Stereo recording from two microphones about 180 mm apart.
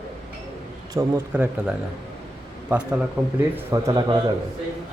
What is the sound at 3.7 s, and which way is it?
Speech, 15° right (ahead or behind).